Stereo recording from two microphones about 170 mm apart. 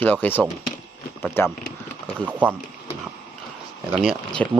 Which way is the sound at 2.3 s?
10° right (ahead or behind).